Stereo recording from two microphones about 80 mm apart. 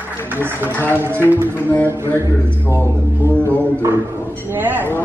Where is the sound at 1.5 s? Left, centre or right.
Left.